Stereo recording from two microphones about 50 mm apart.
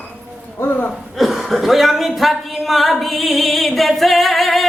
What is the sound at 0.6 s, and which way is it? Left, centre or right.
Speech, left.